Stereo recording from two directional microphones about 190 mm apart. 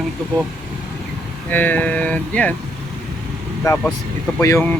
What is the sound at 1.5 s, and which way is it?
Speech, 10° left (ahead or behind).